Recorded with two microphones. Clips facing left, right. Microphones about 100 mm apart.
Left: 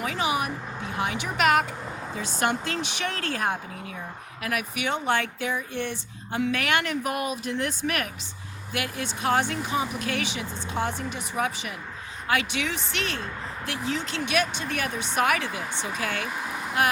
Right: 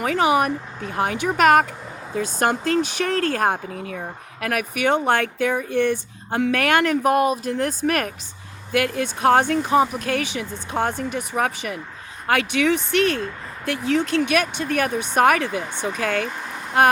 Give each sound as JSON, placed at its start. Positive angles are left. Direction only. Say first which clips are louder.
{"t": 0.0, "sound": "speech", "louder": "right 8 dB", "side_deg": -55}
{"t": 8.7, "sound": "speech", "louder": "right 9 dB", "side_deg": -55}